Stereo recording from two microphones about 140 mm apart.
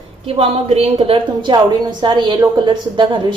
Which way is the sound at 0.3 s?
45° right (ahead or behind).